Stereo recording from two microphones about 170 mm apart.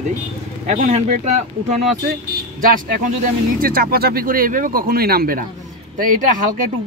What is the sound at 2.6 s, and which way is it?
Speech, 55° right (ahead or behind).